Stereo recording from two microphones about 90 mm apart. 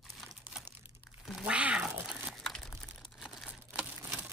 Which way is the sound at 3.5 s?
15° right (ahead or behind).